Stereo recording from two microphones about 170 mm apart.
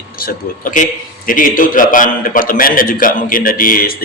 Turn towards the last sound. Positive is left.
turn(degrees=60)  # may be behind; listen again after turning